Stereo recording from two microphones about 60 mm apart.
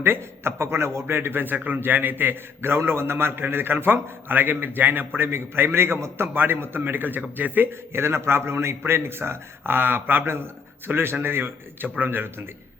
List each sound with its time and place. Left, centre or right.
0.0 s a man's voice: right